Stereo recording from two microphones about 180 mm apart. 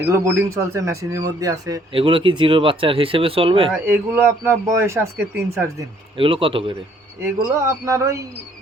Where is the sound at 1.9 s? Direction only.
30° right (ahead or behind).